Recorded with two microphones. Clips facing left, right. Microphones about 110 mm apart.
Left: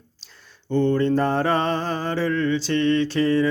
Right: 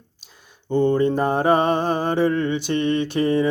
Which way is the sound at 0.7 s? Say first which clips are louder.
Right 1 dB; 15° right (ahead or behind).